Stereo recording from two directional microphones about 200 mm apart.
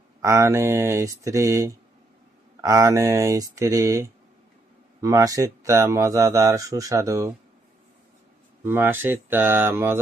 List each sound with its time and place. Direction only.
0.2 s speech: 15° right (ahead or behind)
8.6 s speech: 10° right (ahead or behind)